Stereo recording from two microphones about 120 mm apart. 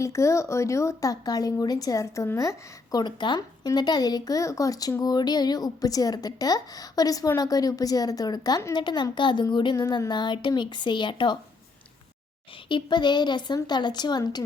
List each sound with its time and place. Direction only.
0.0 s a woman's voice: 25° left (ahead or behind); by 11.3 s 40° left (ahead or behind)
12.6 s a woman's voice: 40° left (ahead or behind)